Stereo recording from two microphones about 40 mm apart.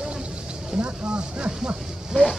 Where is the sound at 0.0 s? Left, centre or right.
Centre.